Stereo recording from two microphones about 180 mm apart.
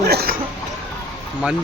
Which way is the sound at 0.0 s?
60° right (ahead or behind).